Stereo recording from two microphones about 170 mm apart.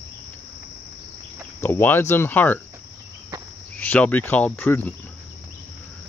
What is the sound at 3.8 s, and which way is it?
Speech, 10° left (ahead or behind).